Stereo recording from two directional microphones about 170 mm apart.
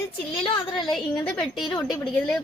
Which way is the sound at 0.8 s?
Centre (ahead or behind).